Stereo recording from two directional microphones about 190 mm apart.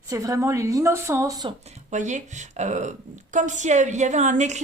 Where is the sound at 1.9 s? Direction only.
40° right (ahead or behind).